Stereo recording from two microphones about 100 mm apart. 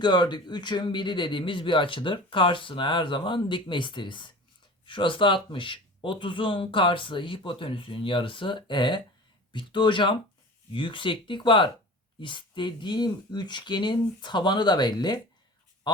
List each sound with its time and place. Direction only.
0.0 s a man's voice: 50° left (ahead or behind)